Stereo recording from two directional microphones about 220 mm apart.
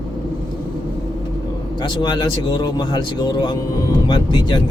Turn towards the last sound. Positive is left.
turn(degrees=20)  # may be behind; listen again after turning